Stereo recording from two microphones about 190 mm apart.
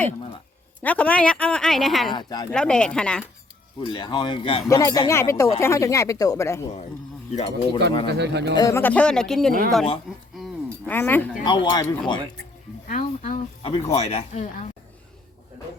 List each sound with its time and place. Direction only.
0.8 s a woman's voice: 10° left (ahead or behind)
2.1 s speech: 20° left (ahead or behind)
2.5 s a woman's voice: 5° left (ahead or behind)
3.8 s speech: 25° left (ahead or behind)
7.3 s speech: 30° left (ahead or behind)
8.0 s speech: 60° right (ahead or behind)
8.5 s a woman's voice: 15° left (ahead or behind)
10.3 s chink: centre (ahead or behind)
10.9 s speech: 10° left (ahead or behind)
11.4 s speech: 25° left (ahead or behind)
12.9 s speech: 40° left (ahead or behind)